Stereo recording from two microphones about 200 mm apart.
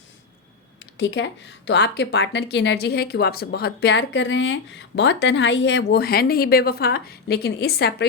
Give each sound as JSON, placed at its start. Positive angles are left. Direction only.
{"t": 0.9, "sound": "speech", "side_deg": 65}